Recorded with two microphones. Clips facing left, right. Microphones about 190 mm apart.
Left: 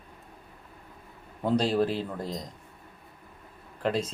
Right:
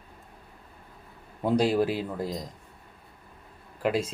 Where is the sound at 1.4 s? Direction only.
10° right (ahead or behind).